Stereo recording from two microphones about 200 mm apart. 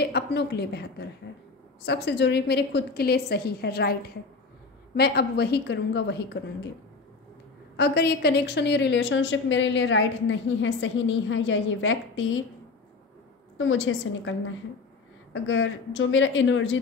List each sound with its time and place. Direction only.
0.0 s a woman's voice: 55° left (ahead or behind)
7.7 s a woman's voice: 55° left (ahead or behind)
13.6 s a woman's voice: 75° left (ahead or behind)